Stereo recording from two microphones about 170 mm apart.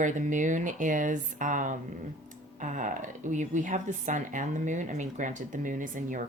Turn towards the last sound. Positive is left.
turn(degrees=-50)  # may be behind; listen again after turning